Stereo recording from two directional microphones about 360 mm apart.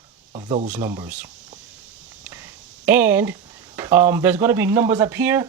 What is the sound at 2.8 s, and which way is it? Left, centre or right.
Speech, centre.